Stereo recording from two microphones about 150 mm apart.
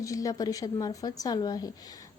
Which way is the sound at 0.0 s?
20° left (ahead or behind).